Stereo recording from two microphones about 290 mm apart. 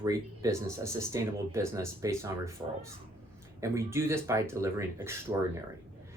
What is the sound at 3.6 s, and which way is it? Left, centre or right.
Speech, centre.